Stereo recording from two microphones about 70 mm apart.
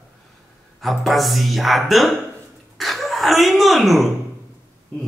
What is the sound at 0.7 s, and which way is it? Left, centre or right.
A man's voice, centre.